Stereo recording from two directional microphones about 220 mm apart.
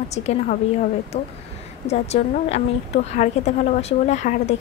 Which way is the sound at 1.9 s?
30° left (ahead or behind).